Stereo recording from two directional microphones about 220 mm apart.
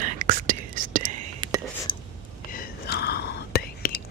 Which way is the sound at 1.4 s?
20° right (ahead or behind).